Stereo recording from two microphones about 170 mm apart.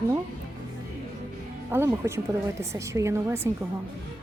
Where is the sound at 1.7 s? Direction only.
15° right (ahead or behind).